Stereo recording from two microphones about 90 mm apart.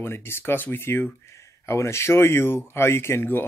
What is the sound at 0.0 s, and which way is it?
Speech, 25° left (ahead or behind).